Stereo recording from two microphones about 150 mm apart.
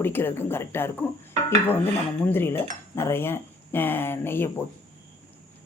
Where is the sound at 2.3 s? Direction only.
15° left (ahead or behind).